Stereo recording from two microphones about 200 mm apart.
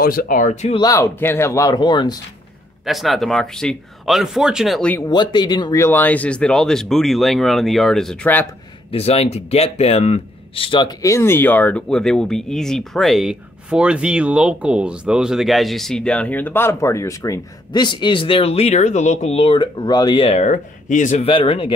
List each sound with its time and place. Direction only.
0.0 s speech: 45° left (ahead or behind)
0.7 s speech: 15° left (ahead or behind)
2.8 s speech: centre (ahead or behind)
5.1 s speech: 20° left (ahead or behind)
8.9 s speech: 30° left (ahead or behind)